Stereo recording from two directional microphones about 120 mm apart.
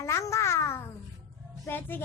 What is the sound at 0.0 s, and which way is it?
Babbling, 25° left (ahead or behind).